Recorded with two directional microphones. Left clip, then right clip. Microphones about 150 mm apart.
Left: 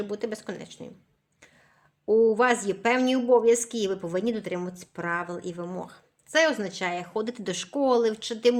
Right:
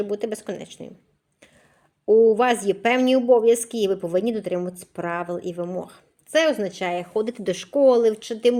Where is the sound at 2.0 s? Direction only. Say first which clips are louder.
Right 5 dB; 25° right (ahead or behind).